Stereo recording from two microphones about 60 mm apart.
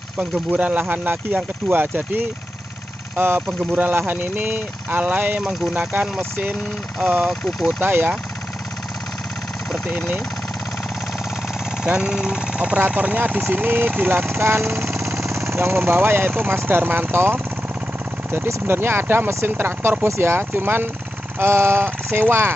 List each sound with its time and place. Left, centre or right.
0.2 s speech: right
5.4 s speech: centre
7.0 s speech: centre
7.8 s speech: right
11.8 s speech: centre; by 22.5 s right